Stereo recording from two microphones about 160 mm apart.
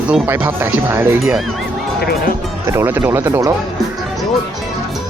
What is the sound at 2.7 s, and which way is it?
Speech, 15° right (ahead or behind).